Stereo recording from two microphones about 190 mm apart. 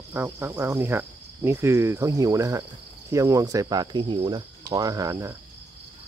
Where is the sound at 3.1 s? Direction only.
15° right (ahead or behind).